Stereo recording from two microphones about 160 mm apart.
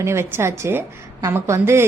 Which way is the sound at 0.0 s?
15° right (ahead or behind).